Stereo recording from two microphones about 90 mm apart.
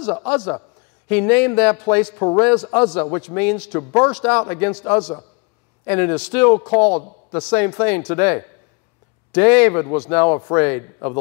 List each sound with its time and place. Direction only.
0.0 s a man's voice: 15° left (ahead or behind)
2.1 s a man's voice: 25° left (ahead or behind)
2.4 s a man's voice: 15° left (ahead or behind)